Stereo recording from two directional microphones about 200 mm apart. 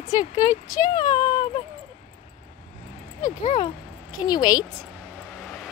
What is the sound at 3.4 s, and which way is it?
Speech, 30° left (ahead or behind).